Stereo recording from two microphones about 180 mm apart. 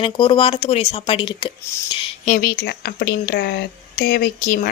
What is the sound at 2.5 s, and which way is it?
Speech, 65° left (ahead or behind).